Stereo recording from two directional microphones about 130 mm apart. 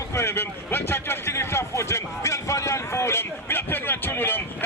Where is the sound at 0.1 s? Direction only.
20° left (ahead or behind).